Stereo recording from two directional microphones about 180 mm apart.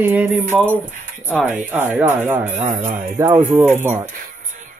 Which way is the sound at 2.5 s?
45° right (ahead or behind).